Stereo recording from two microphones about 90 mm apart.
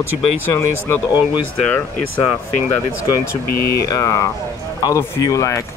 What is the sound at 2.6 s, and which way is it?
Speech, 25° left (ahead or behind).